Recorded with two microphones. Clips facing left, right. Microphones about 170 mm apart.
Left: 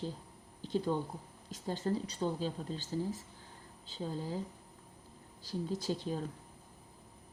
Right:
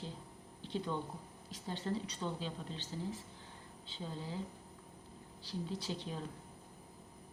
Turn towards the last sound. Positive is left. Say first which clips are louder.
# left 6 dB
turn(degrees=40)  # may be behind; listen again after turning